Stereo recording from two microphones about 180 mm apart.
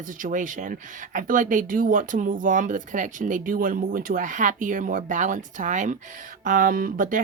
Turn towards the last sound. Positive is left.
turn(degrees=-50)  # may be behind; listen again after turning